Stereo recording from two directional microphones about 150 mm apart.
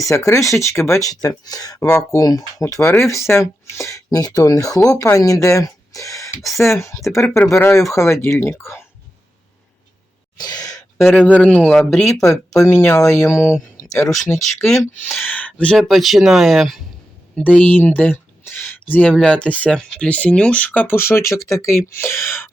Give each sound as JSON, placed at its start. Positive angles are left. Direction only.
{"t": 0.0, "sound": "speech", "side_deg": 20}
{"t": 1.9, "sound": "speech", "side_deg": 5}
{"t": 2.1, "sound": "speech", "side_deg": 25}
{"t": 10.3, "sound": "a sound", "side_deg": 25}
{"t": 11.0, "sound": "speech", "side_deg": 10}
{"t": 12.6, "sound": "speech", "side_deg": 20}
{"t": 14.6, "sound": "speech", "side_deg": 0}
{"t": 17.4, "sound": "speech", "side_deg": 10}